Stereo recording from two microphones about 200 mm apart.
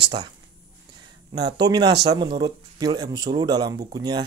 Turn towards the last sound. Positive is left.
turn(degrees=-20)  # may be behind; listen again after turning